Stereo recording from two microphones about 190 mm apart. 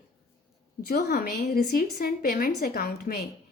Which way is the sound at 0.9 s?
55° left (ahead or behind).